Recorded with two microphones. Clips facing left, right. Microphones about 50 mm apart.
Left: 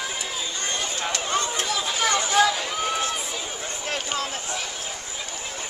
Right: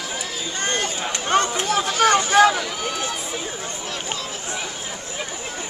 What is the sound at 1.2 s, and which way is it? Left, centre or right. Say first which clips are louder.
Chatter: right 8 dB; right.